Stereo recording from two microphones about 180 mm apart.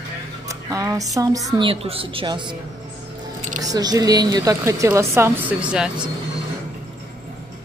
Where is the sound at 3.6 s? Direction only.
20° right (ahead or behind); by 6.0 s 5° right (ahead or behind).